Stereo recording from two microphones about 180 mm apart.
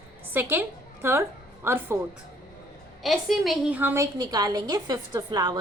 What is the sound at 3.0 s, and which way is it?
A woman's voice, centre (ahead or behind).